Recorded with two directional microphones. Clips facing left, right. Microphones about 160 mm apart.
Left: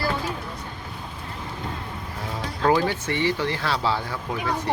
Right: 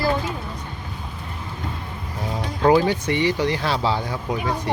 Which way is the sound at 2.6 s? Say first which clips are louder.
Right 4 dB; 20° right (ahead or behind).